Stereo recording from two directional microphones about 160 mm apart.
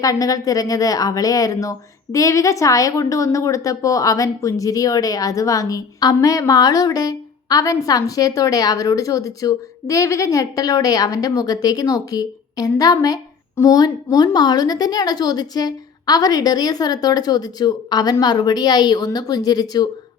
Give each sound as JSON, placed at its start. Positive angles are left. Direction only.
{"t": 0.0, "sound": "a woman's voice", "side_deg": 20}